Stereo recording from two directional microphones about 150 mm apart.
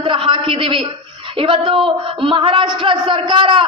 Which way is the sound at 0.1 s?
35° right (ahead or behind).